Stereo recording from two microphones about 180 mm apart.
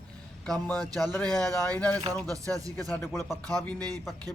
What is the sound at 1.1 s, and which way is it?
Speech, 5° left (ahead or behind).